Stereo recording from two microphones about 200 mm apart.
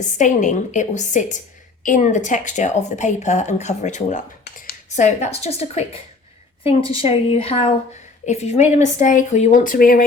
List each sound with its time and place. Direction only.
0.0 s a woman's voice: 40° left (ahead or behind)